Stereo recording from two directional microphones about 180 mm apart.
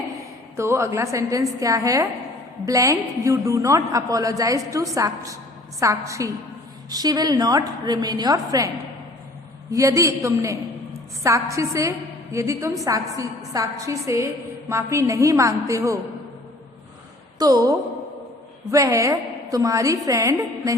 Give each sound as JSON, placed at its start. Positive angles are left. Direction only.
{"t": 0.5, "sound": "a woman's voice", "side_deg": -15}
{"t": 17.3, "sound": "a woman's voice", "side_deg": -20}